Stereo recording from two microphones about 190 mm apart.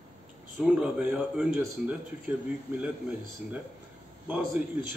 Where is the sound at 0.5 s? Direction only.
5° right (ahead or behind).